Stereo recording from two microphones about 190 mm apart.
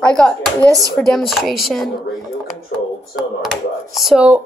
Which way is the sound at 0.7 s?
20° right (ahead or behind).